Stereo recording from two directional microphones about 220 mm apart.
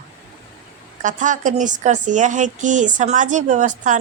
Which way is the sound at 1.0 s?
35° right (ahead or behind).